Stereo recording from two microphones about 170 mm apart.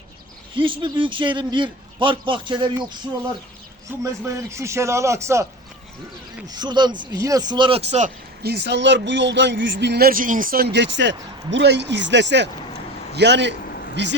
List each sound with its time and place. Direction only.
0.5 s a man's voice: 30° right (ahead or behind)
4.0 s a man's voice: 15° right (ahead or behind)
6.5 s a man's voice: 25° right (ahead or behind); by 8.1 s 40° right (ahead or behind)
8.4 s speech: 85° right